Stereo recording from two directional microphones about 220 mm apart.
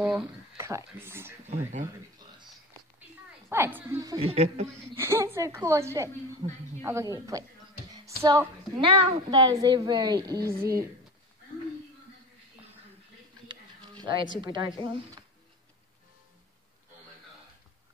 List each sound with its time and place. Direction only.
0.0 s speech: 10° right (ahead or behind)
3.4 s a woman's voice: 10° right (ahead or behind)
4.3 s a woman's voice: 30° right (ahead or behind)
4.9 s a woman's voice: 10° right (ahead or behind)
13.5 s a sound: 20° right (ahead or behind)
14.4 s a woman's voice: 20° right (ahead or behind)